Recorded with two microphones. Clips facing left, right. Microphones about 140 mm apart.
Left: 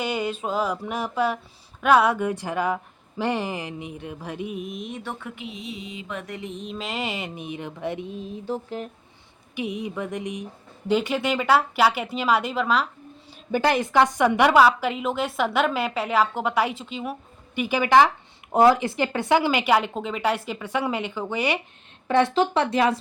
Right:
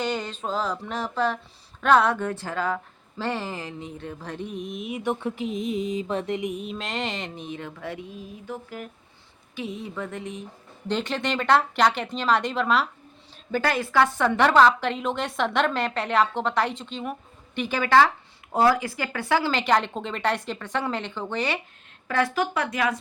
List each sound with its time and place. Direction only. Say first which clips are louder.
0.0 s a woman's voice: left 2 dB; 10° left (ahead or behind); by 5.1 s 10° right (ahead or behind)
5.2 s a sound: right 8 dB; 35° right (ahead or behind)
6.3 s a woman's voice: right 4 dB; 15° right (ahead or behind); by 8.9 s 30° left (ahead or behind)
9.6 s a woman's voice: left 3 dB; 15° left (ahead or behind)
13.5 s a woman's voice: left 3 dB; 15° left (ahead or behind)
22.0 s speech: left 5 dB; 25° left (ahead or behind)